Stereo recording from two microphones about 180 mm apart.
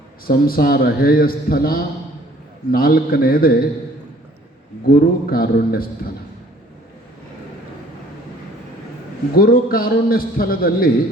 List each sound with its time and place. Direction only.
0.3 s a man's voice: 55° left (ahead or behind)
4.9 s a man's voice: 55° left (ahead or behind)
9.3 s a man's voice: 55° left (ahead or behind)